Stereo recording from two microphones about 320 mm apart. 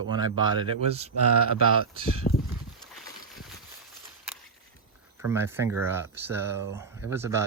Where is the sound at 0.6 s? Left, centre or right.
Centre.